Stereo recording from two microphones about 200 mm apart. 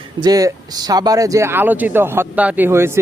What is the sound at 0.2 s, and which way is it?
Speech, 20° right (ahead or behind).